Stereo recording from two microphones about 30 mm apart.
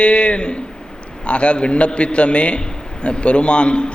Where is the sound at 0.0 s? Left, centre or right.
Left.